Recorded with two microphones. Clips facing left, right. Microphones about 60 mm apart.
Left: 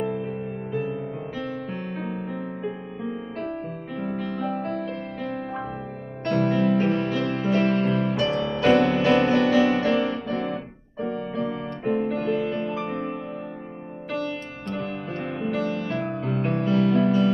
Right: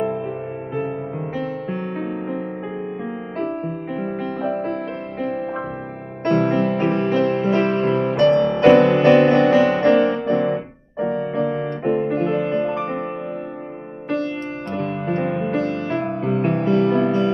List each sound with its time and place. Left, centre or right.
2.0 s music: right
6.2 s music: right
8.6 s music: right
8.9 s music: right
11.0 s music: right
11.8 s music: centre
12.1 s music: right
14.8 s music: right
15.2 s music: right
15.5 s music: right